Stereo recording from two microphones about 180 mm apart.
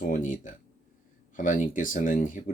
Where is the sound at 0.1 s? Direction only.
45° left (ahead or behind).